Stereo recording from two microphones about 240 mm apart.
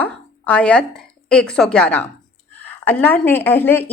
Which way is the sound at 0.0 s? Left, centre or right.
Centre.